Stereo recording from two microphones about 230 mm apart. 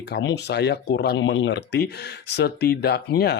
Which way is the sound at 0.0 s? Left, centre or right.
Left.